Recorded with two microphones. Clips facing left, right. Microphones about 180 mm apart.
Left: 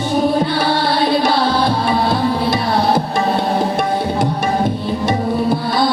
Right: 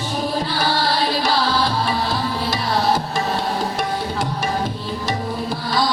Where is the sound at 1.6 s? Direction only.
60° left (ahead or behind).